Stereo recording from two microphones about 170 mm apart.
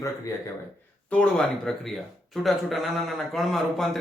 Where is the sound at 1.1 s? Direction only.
5° left (ahead or behind).